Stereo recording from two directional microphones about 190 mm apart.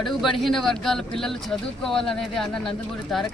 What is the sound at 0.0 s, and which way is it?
Speech, centre (ahead or behind).